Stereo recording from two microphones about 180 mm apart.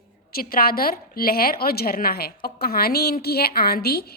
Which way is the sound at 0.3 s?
55° left (ahead or behind).